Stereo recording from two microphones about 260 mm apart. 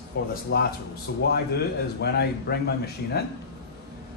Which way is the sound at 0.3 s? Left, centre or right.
Left.